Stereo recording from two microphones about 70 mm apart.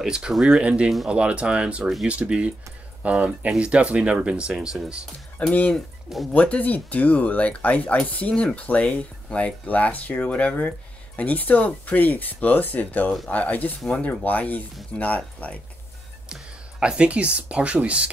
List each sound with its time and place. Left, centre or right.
0.0 s speech: centre
5.5 s speech: centre
13.7 s speech: centre
14.2 s speech: left
16.8 s speech: centre